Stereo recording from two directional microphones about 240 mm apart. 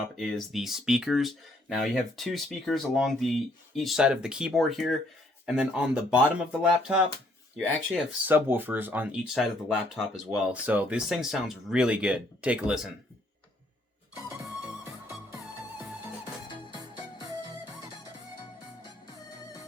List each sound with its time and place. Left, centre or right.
0.2 s speech: centre
16.5 s music: centre